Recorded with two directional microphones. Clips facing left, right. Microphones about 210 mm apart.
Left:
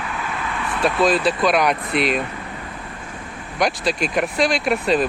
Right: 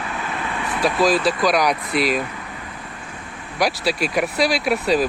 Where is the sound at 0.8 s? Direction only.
Centre (ahead or behind).